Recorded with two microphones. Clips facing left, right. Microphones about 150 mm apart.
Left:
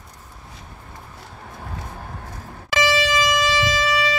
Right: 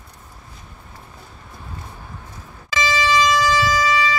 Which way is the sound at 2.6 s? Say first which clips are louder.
Left 1 dB; 60° left (ahead or behind).